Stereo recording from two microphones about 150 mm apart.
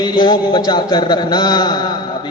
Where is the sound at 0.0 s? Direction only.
30° left (ahead or behind).